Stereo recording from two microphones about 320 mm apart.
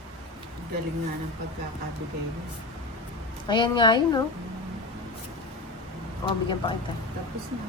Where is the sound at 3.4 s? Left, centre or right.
Centre.